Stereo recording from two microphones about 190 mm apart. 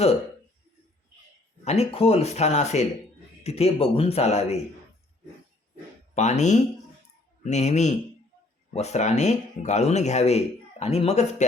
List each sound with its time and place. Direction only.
1.6 s speech: 35° left (ahead or behind)
6.1 s speech: 35° left (ahead or behind)